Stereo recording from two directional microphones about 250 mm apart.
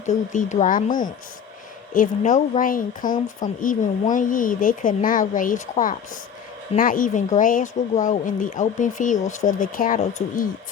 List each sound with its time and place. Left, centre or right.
0.0 s speech: left